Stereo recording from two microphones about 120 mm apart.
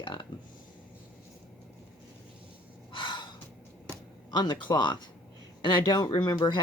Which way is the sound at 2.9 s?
40° left (ahead or behind).